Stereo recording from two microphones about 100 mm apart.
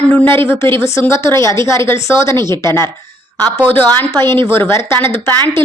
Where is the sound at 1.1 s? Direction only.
30° left (ahead or behind).